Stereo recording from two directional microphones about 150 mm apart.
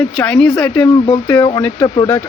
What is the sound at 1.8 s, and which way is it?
Speech, 25° left (ahead or behind).